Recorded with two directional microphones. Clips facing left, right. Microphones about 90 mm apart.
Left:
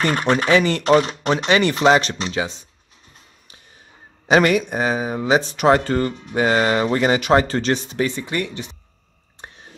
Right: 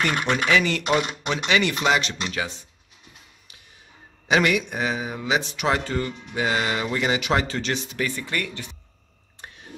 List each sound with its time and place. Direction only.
0.0 s speech: 35° left (ahead or behind)
2.3 s speech: 20° left (ahead or behind)
4.3 s speech: 40° left (ahead or behind); by 8.7 s 20° left (ahead or behind)
9.4 s a sound: 30° left (ahead or behind)